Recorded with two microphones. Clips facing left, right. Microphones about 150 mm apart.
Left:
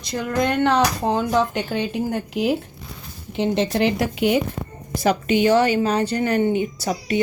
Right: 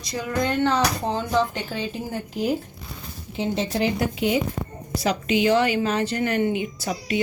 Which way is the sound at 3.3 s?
65° left (ahead or behind).